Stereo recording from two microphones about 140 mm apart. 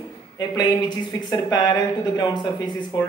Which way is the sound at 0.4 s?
35° left (ahead or behind).